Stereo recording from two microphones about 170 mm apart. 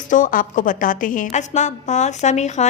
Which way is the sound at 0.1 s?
50° left (ahead or behind).